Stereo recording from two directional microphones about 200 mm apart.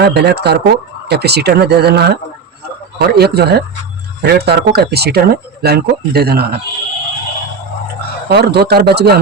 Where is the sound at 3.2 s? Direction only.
55° right (ahead or behind).